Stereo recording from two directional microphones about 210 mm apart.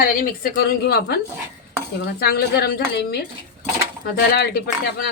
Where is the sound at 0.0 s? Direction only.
45° left (ahead or behind).